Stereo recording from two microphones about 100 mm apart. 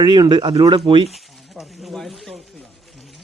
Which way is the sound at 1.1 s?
Centre (ahead or behind).